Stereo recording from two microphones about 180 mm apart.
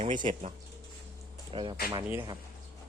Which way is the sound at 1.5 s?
30° right (ahead or behind).